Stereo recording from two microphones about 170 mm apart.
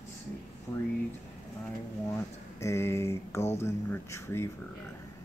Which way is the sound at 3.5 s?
15° left (ahead or behind).